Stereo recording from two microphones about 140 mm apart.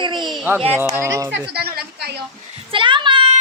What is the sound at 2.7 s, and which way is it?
Speech, 35° right (ahead or behind).